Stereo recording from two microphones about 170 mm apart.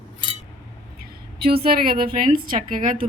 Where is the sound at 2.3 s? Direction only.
50° right (ahead or behind).